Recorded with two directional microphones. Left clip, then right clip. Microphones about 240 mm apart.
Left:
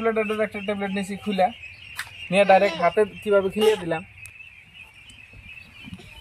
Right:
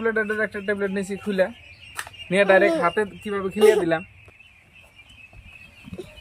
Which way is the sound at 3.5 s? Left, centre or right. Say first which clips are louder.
Right 4 dB; right.